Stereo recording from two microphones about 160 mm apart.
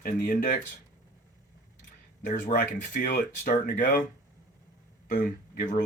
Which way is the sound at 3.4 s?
50° left (ahead or behind).